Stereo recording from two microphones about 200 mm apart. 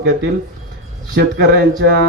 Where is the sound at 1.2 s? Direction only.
60° right (ahead or behind).